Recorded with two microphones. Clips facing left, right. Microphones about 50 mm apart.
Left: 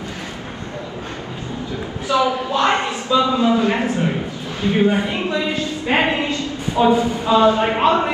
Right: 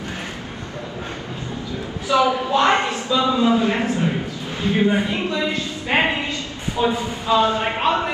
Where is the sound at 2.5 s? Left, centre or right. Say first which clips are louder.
Right 1 dB; right.